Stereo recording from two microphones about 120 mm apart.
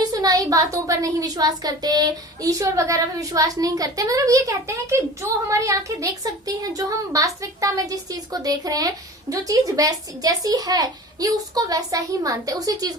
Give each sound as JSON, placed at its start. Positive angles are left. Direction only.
{"t": 0.0, "sound": "a woman's voice", "side_deg": -30}